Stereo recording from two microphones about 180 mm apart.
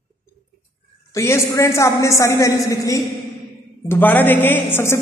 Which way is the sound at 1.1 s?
15° left (ahead or behind).